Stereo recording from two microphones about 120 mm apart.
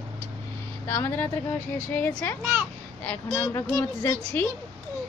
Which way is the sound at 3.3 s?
25° left (ahead or behind).